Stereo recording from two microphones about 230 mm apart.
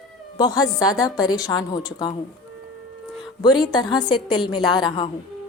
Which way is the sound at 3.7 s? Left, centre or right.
Centre.